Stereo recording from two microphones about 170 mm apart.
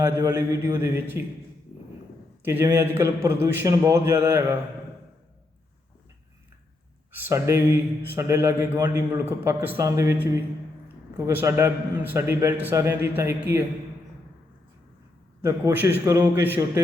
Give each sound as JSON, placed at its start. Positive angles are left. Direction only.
{"t": 0.0, "sound": "a man's voice", "side_deg": -20}
{"t": 2.4, "sound": "a man's voice", "side_deg": -15}
{"t": 7.1, "sound": "a man's voice", "side_deg": -15}
{"t": 15.4, "sound": "a man's voice", "side_deg": -15}